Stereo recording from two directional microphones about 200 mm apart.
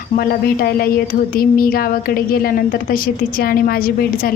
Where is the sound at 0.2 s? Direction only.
50° left (ahead or behind).